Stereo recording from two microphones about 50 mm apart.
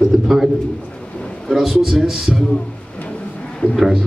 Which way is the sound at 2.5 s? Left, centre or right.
Left.